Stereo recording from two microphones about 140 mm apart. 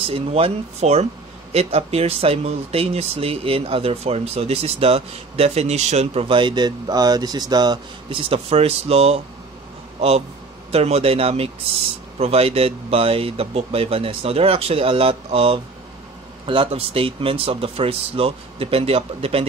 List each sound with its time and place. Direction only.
0.0 s speech: 45° right (ahead or behind)